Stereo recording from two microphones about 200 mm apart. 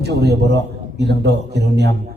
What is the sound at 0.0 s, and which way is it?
A man's voice, 55° right (ahead or behind).